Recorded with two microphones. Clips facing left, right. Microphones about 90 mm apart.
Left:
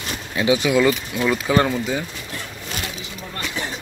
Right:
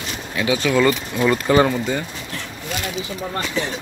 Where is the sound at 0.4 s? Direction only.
20° left (ahead or behind).